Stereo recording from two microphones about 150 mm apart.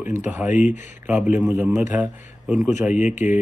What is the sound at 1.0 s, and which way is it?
Speech, 15° right (ahead or behind).